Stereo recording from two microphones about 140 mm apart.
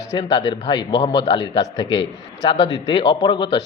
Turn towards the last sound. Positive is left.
turn(degrees=35)  # may be behind; listen again after turning